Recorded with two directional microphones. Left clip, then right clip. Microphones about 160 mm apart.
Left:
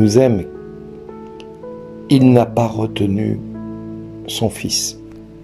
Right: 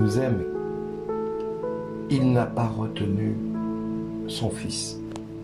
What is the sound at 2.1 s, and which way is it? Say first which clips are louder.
Speech: left 12 dB; 35° left (ahead or behind).